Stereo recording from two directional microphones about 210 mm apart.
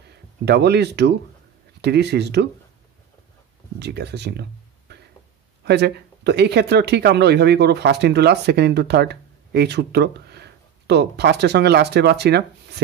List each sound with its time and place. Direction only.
0.1 s speech: 50° right (ahead or behind)
3.8 s speech: 55° right (ahead or behind)